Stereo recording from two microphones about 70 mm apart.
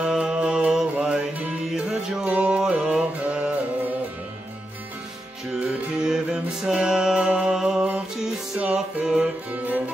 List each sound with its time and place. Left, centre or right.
0.0 s music: centre
5.5 s music: centre